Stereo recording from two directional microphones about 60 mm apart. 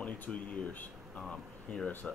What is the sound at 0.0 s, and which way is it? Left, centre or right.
Speech, left.